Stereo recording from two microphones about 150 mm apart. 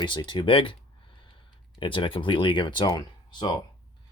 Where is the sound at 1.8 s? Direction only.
35° left (ahead or behind).